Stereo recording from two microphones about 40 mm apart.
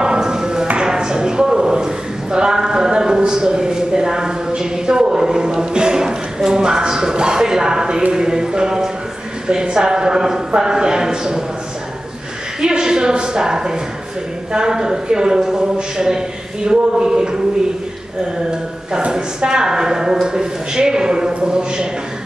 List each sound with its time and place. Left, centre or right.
0.0 s tap: centre
0.7 s a sound: centre
4.5 s speech: centre
8.1 s a sound: centre
9.5 s a man's voice: centre
12.5 s a man's voice: centre
18.5 s a woman's voice: right